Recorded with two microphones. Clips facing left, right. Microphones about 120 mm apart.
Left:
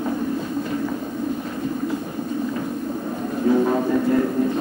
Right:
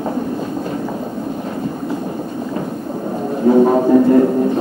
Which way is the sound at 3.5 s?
35° right (ahead or behind).